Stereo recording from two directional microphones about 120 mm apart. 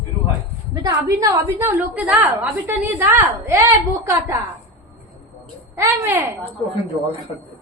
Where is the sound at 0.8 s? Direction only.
25° right (ahead or behind).